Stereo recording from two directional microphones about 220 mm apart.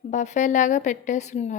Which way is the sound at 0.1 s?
30° left (ahead or behind).